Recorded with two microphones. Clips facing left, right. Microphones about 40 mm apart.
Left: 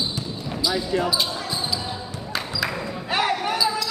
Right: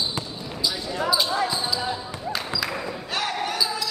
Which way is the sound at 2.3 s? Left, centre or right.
Centre.